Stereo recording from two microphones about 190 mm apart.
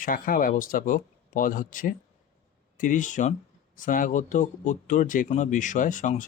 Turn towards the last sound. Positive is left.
turn(degrees=40)  # may be behind; listen again after turning